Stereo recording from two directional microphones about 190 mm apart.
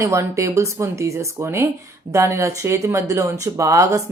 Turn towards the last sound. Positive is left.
turn(degrees=-15)  # may be behind; listen again after turning